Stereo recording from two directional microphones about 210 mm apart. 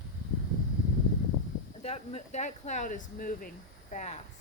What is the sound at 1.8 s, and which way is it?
Speech, 30° left (ahead or behind).